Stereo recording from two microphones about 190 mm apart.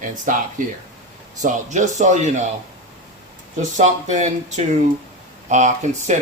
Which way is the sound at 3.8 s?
40° right (ahead or behind).